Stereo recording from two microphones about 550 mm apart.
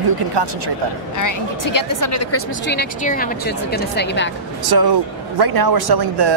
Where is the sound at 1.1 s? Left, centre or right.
Left; by 4.3 s centre.